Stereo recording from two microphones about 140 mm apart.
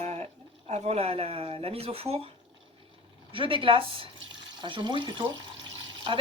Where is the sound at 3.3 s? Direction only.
40° right (ahead or behind).